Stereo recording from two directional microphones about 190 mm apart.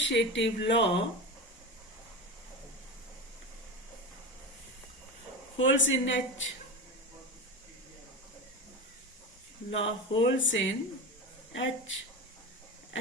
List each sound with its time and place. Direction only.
0.0 s speech: 70° left (ahead or behind)
5.5 s speech: 80° left
9.6 s speech: 75° left (ahead or behind)